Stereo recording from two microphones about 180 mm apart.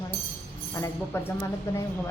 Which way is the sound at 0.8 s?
15° left (ahead or behind).